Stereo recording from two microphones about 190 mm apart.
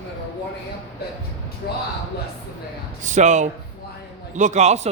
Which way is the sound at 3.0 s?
40° right (ahead or behind).